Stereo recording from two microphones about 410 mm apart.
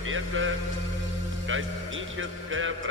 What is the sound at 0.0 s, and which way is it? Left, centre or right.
Music, right.